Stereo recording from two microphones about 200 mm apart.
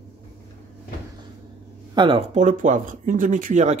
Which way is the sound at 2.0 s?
25° right (ahead or behind).